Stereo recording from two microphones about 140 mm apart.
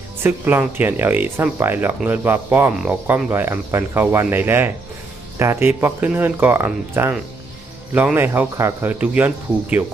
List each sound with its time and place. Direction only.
0.2 s speech: 15° right (ahead or behind)